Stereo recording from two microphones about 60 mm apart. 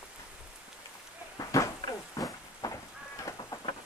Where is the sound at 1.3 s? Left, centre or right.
Left.